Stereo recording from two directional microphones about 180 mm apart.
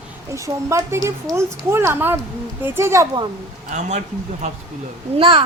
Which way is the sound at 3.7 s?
40° right (ahead or behind).